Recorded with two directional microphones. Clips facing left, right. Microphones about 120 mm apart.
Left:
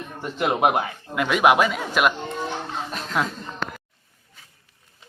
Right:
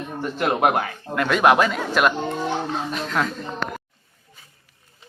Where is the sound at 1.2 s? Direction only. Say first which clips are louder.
Right 1 dB; 5° left (ahead or behind).